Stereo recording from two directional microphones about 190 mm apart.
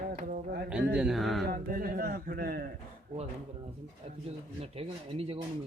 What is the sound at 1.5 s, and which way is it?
Speech, 50° right (ahead or behind).